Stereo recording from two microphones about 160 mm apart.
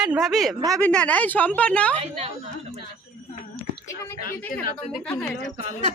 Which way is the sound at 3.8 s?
20° left (ahead or behind).